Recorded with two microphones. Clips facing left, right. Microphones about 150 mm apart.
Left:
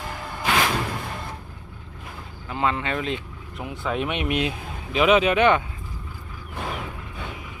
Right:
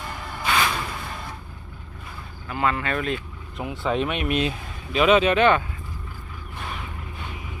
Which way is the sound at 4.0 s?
20° left (ahead or behind).